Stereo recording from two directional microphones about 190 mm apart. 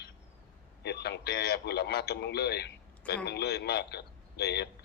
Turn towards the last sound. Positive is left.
turn(degrees=60)  # may be behind; listen again after turning